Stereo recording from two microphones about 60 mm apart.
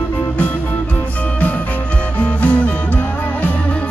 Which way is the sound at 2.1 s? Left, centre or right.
Left.